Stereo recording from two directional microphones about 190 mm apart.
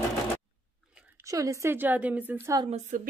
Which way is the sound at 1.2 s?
15° right (ahead or behind).